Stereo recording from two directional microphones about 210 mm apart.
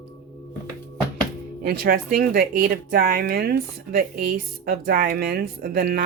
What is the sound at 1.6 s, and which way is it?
Speech, 45° right (ahead or behind).